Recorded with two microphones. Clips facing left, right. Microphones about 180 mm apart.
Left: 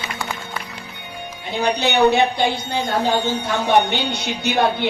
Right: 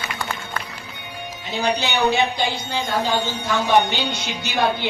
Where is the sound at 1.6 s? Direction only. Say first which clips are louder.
Left 4 dB; 60° left (ahead or behind).